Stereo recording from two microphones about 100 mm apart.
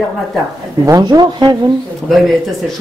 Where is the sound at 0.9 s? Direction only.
45° right (ahead or behind).